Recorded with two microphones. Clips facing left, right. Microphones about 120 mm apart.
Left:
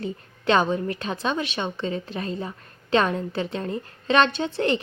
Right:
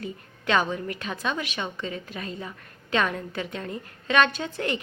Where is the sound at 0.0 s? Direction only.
30° left (ahead or behind).